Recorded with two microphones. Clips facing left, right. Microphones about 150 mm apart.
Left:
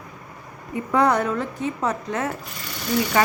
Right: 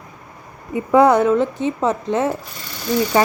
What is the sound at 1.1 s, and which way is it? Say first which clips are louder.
Speech: right 7 dB; 25° right (ahead or behind).